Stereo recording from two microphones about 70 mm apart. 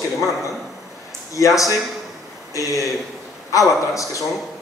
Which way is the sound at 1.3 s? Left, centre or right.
Left.